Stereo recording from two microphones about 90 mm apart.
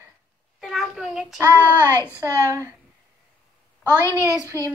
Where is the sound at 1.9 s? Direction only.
25° left (ahead or behind).